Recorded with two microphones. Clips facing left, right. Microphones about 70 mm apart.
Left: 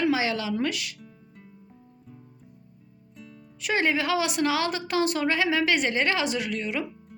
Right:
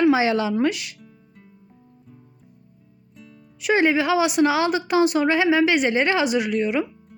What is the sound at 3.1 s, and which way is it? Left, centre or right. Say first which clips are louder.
Music: even; centre.